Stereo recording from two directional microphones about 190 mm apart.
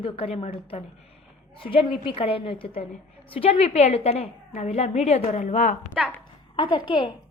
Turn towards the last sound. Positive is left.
turn(degrees=25)  # may be behind; listen again after turning